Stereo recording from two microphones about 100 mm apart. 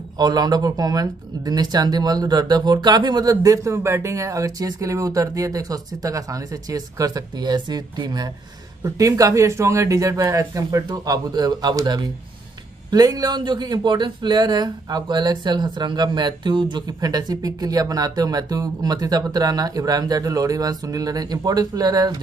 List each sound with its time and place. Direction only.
0.2 s speech: 40° right (ahead or behind)